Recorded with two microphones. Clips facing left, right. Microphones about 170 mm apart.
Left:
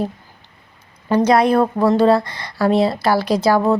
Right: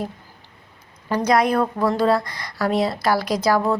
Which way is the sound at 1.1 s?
30° left (ahead or behind).